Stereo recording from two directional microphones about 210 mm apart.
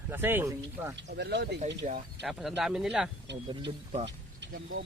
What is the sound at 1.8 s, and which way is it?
Speech, 35° right (ahead or behind).